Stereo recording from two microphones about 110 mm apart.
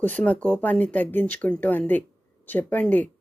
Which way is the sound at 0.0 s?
15° left (ahead or behind).